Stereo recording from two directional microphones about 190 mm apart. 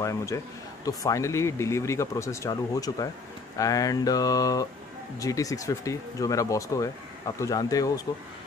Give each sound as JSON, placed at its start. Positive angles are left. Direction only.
{"t": 0.0, "sound": "speech", "side_deg": 15}